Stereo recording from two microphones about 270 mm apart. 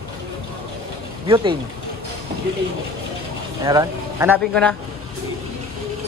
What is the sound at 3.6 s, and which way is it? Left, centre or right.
Speech, centre.